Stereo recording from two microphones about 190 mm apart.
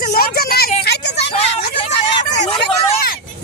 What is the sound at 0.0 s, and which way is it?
Vehicle, 55° left (ahead or behind).